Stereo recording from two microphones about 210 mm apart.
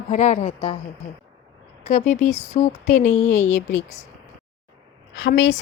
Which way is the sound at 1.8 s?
35° left (ahead or behind).